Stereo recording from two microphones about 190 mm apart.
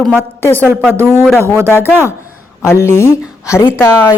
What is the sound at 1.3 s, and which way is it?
Speech, 15° right (ahead or behind).